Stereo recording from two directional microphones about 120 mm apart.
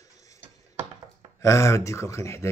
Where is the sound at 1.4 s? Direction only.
25° left (ahead or behind).